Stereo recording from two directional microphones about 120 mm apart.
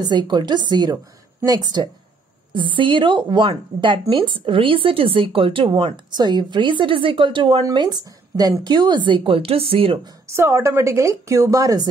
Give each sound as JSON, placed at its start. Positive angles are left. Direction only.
{"t": 0.0, "sound": "speech", "side_deg": -35}
{"t": 7.6, "sound": "speech", "side_deg": -35}
{"t": 10.2, "sound": "a woman's voice", "side_deg": -25}